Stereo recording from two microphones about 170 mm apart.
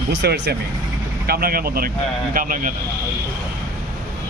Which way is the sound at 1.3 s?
60° right (ahead or behind).